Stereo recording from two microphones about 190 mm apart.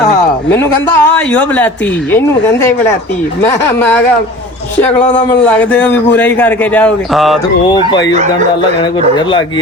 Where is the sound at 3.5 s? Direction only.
10° left (ahead or behind).